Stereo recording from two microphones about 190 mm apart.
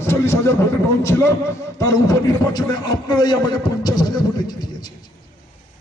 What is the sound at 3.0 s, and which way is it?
Speech, 20° left (ahead or behind).